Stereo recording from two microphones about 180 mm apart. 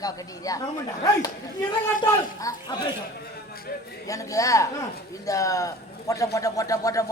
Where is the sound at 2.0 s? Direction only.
20° left (ahead or behind).